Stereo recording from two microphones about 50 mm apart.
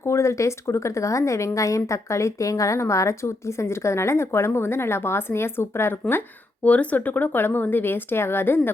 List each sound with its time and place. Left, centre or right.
0.0 s speech: left
6.7 s speech: left